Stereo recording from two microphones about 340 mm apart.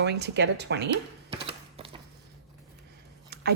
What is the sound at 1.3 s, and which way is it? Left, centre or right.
Music, centre.